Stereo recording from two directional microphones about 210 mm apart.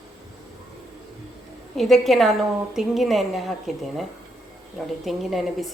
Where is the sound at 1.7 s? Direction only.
Centre (ahead or behind).